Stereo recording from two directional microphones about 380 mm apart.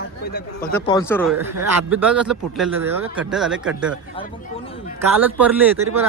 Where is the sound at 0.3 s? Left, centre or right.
Left.